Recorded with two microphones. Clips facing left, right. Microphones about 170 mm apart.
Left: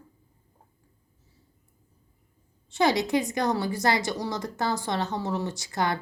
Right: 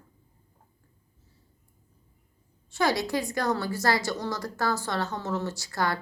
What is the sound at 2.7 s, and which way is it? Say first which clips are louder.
A woman's voice: left 3 dB; 20° left (ahead or behind).